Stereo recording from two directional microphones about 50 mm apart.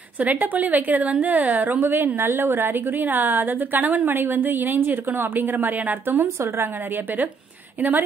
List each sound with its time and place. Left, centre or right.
0.2 s a woman's voice: right
6.4 s a woman's voice: right